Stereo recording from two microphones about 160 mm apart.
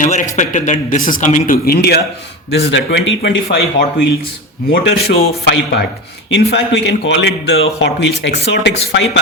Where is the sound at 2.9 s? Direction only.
90° left.